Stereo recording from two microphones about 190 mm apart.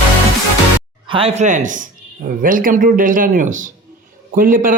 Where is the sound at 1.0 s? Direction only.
30° right (ahead or behind).